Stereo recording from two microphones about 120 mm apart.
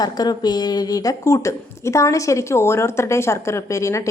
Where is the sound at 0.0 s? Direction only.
35° left (ahead or behind).